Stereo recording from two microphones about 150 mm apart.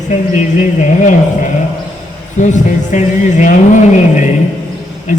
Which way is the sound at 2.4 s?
55° left (ahead or behind).